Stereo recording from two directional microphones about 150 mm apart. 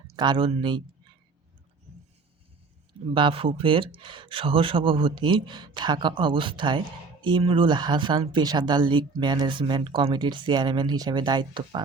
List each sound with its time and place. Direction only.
0.2 s speech: 35° right (ahead or behind)
3.2 s speech: 35° right (ahead or behind)